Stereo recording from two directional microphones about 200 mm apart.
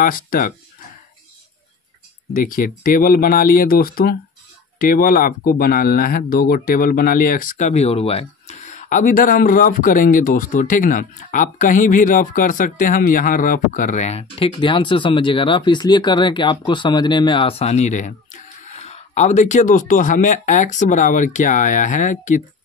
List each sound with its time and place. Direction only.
0.0 s speech: 45° left (ahead or behind)
2.3 s speech: 45° left (ahead or behind)